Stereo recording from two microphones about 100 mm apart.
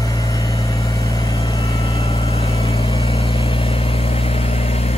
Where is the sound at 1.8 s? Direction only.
70° left (ahead or behind).